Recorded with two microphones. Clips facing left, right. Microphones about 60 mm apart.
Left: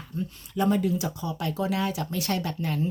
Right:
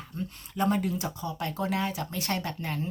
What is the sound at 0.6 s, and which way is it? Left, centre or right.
Speech, right.